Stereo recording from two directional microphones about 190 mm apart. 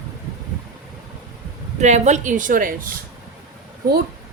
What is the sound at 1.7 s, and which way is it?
A woman's voice, 40° right (ahead or behind).